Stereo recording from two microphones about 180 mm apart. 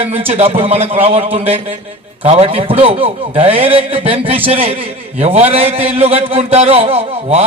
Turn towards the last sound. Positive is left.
turn(degrees=-35)  # may be behind; listen again after turning